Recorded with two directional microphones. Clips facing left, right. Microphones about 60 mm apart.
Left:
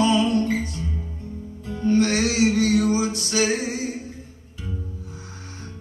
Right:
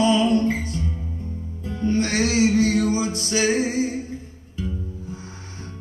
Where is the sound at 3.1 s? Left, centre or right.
Right.